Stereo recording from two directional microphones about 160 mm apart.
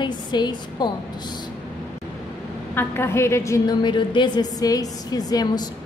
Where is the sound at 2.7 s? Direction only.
15° left (ahead or behind).